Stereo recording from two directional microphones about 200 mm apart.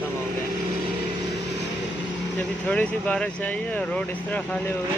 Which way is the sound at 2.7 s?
5° left (ahead or behind).